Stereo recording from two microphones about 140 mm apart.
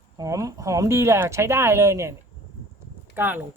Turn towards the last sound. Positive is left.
turn(degrees=-15)  # may be behind; listen again after turning